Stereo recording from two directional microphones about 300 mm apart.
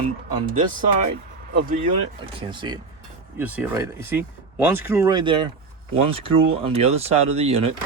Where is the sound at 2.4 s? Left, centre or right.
Centre.